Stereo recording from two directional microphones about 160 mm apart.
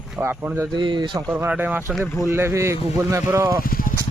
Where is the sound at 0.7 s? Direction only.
30° right (ahead or behind).